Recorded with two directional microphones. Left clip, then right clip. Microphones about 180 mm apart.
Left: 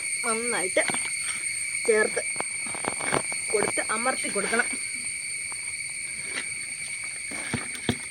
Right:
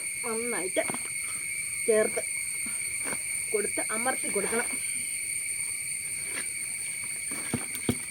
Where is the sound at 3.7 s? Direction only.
25° right (ahead or behind).